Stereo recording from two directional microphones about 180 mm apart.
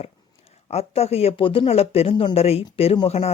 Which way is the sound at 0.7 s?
35° left (ahead or behind).